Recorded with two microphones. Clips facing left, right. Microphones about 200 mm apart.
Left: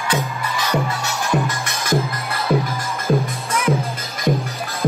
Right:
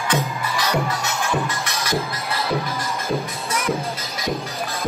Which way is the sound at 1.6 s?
50° left (ahead or behind).